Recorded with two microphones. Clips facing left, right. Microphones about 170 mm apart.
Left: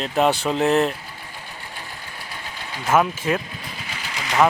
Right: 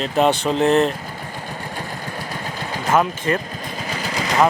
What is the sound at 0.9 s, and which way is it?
Vehicle, 45° right (ahead or behind).